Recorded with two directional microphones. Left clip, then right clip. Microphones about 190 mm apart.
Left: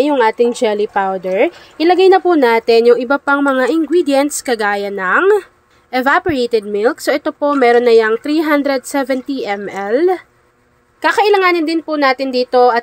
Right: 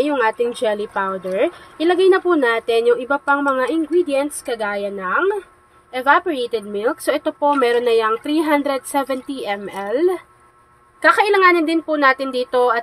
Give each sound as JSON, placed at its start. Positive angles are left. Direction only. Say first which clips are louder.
{"t": 0.0, "sound": "a woman's voice", "louder": "left 6 dB", "side_deg": 30}